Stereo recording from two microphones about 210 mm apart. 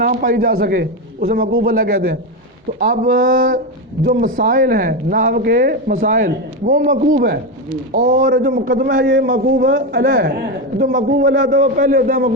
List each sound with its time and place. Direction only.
0.0 s a man's voice: 45° right (ahead or behind)
9.0 s a man's voice: 55° right (ahead or behind)
11.3 s a man's voice: 55° right (ahead or behind)
11.8 s speech: 40° right (ahead or behind)